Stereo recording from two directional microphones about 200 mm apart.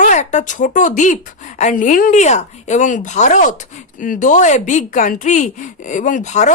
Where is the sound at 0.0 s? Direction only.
35° left (ahead or behind).